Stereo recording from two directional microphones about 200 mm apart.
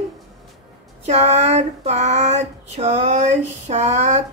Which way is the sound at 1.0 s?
35° right (ahead or behind).